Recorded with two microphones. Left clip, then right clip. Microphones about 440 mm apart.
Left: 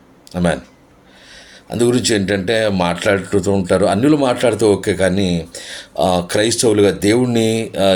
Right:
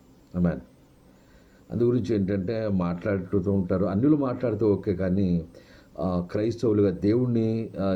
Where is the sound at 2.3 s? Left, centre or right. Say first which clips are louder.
Left 11 dB; right.